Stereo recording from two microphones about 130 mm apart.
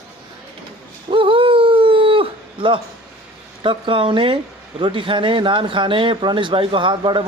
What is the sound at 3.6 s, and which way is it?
Speech, 40° right (ahead or behind).